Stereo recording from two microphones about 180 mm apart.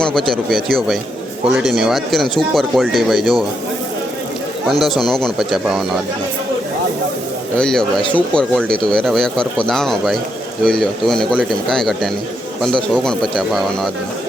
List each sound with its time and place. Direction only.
0.0 s speech: centre (ahead or behind)
4.7 s speech: centre (ahead or behind)
7.5 s speech: 5° left (ahead or behind)